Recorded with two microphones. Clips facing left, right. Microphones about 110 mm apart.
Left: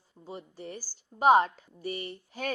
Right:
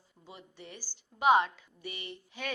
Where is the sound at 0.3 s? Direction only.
40° left (ahead or behind).